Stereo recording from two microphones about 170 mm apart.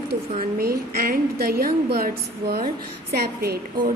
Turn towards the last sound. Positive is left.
turn(degrees=-65)  # may be behind; listen again after turning